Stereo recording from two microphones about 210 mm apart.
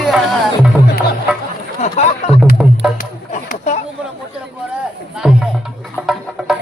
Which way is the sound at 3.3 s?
35° left (ahead or behind).